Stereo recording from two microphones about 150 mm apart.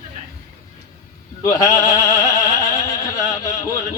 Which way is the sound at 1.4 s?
20° left (ahead or behind).